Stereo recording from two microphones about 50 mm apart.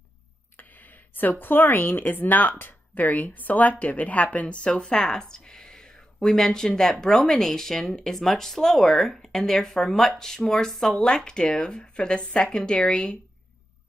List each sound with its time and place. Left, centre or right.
1.1 s speech: left